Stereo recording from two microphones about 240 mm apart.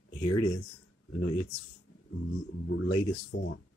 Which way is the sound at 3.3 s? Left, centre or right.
Left.